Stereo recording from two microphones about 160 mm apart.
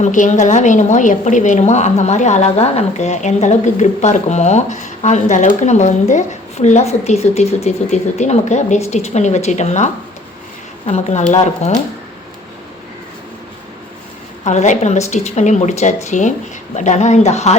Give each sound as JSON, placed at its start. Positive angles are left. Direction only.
{"t": 0.0, "sound": "a woman's voice", "side_deg": 50}
{"t": 14.4, "sound": "a woman's voice", "side_deg": 50}